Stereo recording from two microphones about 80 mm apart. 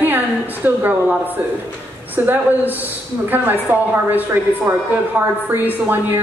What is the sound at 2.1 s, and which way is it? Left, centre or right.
A woman's voice, right.